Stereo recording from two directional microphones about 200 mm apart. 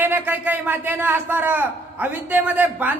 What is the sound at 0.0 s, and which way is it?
A man's voice, 10° right (ahead or behind).